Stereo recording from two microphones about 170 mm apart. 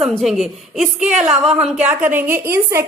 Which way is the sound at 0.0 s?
Centre (ahead or behind).